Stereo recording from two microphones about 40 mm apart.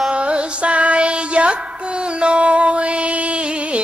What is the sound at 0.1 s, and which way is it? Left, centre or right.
Music, right.